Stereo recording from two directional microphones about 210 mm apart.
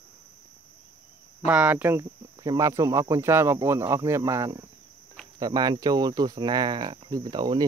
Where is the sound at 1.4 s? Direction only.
5° right (ahead or behind).